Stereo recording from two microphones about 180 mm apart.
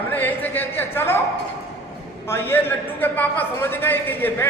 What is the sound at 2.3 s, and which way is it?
A man's voice, 10° left (ahead or behind).